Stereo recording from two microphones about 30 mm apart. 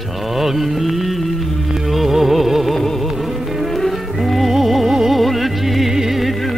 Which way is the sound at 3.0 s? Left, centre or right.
Centre.